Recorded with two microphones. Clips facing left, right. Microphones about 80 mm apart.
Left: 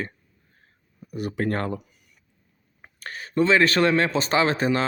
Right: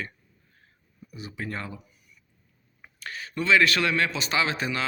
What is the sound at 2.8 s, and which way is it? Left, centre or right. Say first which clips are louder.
Speech: left 1 dB; left.